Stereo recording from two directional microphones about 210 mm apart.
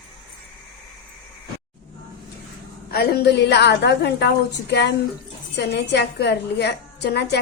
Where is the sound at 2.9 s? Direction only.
50° left (ahead or behind).